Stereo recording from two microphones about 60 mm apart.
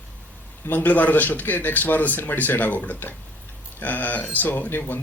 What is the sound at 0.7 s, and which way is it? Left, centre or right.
Speech, left.